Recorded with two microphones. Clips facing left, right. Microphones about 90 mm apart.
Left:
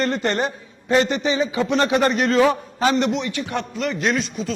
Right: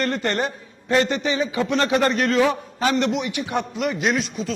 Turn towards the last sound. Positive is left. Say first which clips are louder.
# even
turn(degrees=0)  # may be behind; listen again after turning